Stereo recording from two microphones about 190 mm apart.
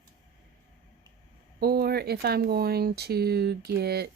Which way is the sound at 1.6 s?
55° right (ahead or behind).